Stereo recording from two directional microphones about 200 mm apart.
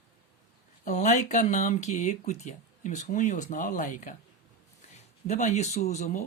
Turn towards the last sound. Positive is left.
turn(degrees=35)  # may be behind; listen again after turning